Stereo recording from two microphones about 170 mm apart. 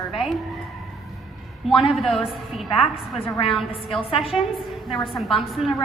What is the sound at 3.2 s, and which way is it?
A woman's voice, 25° left (ahead or behind).